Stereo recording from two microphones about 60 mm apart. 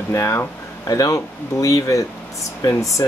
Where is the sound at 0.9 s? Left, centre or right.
Left.